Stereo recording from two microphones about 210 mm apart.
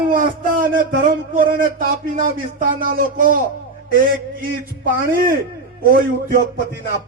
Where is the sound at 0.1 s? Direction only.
40° right (ahead or behind).